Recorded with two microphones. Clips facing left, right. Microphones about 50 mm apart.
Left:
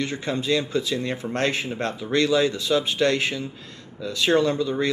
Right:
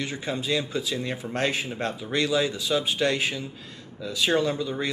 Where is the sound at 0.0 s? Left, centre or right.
Centre.